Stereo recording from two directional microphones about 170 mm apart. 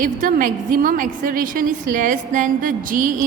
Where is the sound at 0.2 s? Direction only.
50° right (ahead or behind).